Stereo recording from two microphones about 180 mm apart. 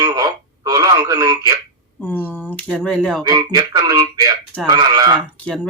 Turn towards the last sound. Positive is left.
turn(degrees=5)  # may be behind; listen again after turning